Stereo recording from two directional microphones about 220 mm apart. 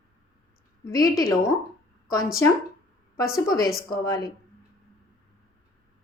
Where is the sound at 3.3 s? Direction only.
15° left (ahead or behind).